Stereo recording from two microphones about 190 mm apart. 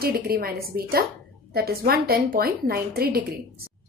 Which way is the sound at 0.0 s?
50° right (ahead or behind).